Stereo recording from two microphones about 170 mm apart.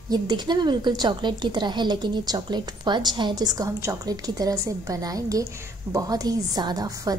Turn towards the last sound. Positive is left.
turn(degrees=-20)  # may be behind; listen again after turning